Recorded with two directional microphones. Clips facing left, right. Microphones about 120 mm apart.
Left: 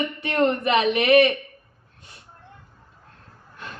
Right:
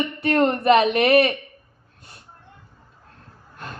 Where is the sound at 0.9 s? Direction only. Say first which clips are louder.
Even; 40° right (ahead or behind).